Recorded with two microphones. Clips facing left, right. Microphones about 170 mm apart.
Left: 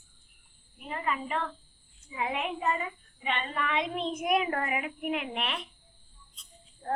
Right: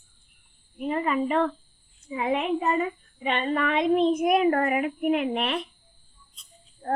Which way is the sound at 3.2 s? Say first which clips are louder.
Right 7 dB; 40° right (ahead or behind).